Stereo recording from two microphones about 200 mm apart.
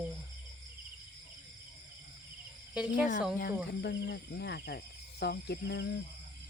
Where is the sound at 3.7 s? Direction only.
55° left (ahead or behind).